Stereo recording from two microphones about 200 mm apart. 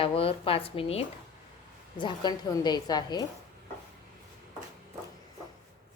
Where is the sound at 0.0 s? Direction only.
25° left (ahead or behind).